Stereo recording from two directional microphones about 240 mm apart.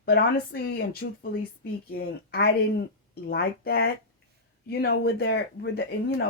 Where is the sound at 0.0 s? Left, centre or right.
Left.